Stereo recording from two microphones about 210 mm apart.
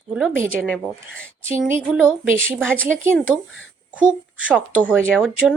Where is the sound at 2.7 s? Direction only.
5° left (ahead or behind).